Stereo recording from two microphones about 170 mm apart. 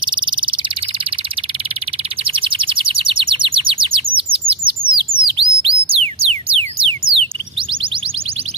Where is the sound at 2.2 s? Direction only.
30° right (ahead or behind).